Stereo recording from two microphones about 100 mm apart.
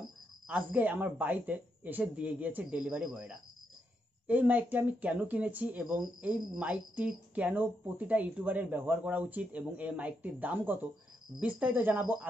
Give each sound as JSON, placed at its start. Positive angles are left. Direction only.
{"t": 0.5, "sound": "speech", "side_deg": -15}